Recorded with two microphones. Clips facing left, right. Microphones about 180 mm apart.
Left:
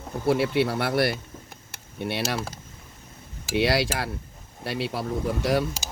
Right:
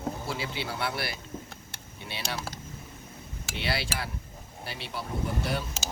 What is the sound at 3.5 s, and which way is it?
Speech, 70° left (ahead or behind).